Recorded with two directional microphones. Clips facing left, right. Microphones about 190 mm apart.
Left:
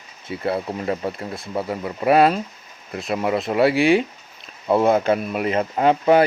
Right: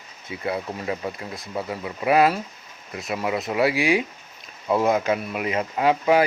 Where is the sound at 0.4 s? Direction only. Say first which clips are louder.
Left 4 dB; 30° left (ahead or behind).